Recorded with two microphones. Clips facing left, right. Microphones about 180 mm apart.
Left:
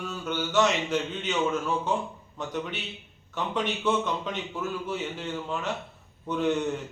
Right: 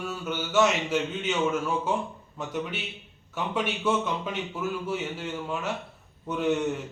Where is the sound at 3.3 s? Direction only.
5° right (ahead or behind).